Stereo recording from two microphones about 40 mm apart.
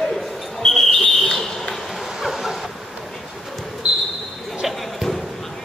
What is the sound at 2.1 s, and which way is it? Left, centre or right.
Vehicle, centre.